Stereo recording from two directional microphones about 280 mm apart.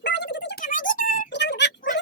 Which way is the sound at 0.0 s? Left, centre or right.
Left.